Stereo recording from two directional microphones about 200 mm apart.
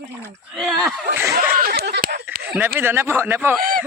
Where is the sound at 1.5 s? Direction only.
45° right (ahead or behind).